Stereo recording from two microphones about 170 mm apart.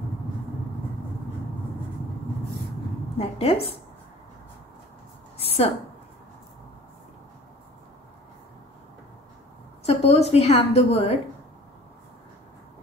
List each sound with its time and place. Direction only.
3.2 s a woman's voice: 35° left (ahead or behind)
9.8 s a woman's voice: 40° left (ahead or behind)